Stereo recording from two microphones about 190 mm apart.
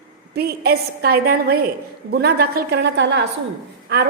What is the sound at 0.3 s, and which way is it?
A woman's voice, 55° right (ahead or behind).